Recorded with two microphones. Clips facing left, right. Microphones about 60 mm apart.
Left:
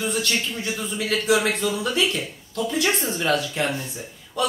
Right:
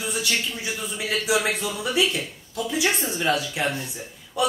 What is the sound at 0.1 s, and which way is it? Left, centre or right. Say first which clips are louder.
A man's voice: left 2 dB; centre.